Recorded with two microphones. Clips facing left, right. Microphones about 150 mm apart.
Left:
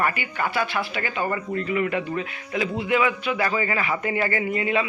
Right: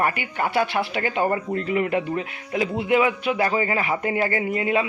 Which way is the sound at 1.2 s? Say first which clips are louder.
Right 2 dB; 25° right (ahead or behind).